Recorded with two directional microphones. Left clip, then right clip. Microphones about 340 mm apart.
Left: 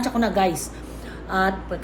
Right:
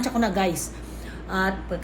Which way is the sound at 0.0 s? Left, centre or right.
Centre.